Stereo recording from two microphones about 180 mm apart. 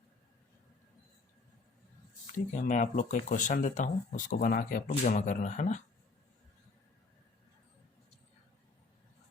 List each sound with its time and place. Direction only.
2.6 s speech: 45° left (ahead or behind)